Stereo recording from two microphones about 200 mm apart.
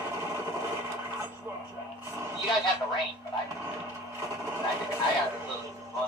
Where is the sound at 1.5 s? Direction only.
10° right (ahead or behind).